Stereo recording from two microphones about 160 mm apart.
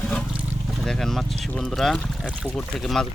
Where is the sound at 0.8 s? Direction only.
5° left (ahead or behind).